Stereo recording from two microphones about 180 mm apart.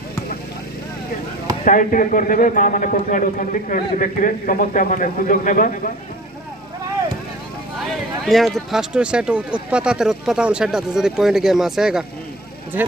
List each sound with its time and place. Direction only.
1.6 s a man's voice: 45° left (ahead or behind)
7.9 s speech: centre (ahead or behind)